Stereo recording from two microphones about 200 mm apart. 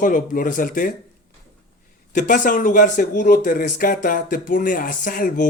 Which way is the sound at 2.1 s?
40° left (ahead or behind).